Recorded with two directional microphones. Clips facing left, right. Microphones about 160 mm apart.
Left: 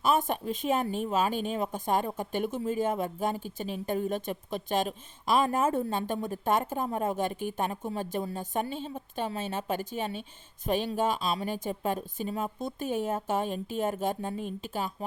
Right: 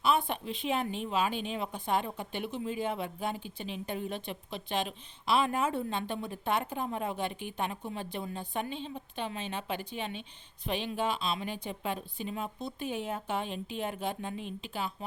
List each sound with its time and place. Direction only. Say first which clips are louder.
0.0 s speech: left 2 dB; 45° left (ahead or behind)